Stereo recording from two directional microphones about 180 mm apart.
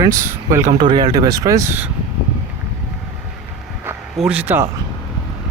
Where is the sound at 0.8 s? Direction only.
25° right (ahead or behind).